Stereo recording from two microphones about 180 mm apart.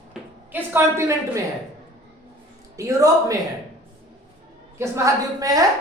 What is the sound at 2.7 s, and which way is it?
Speech, 20° right (ahead or behind).